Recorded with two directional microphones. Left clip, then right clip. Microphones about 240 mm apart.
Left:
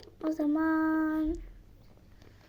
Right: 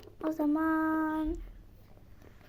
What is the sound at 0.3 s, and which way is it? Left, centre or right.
Child singing, centre.